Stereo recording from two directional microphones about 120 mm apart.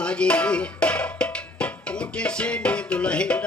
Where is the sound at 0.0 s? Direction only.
10° left (ahead or behind).